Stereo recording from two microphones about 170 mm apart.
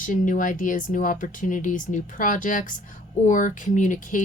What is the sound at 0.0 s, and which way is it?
Speech, 50° left (ahead or behind).